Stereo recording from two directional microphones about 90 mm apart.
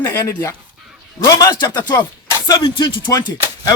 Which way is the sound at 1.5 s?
50° left (ahead or behind).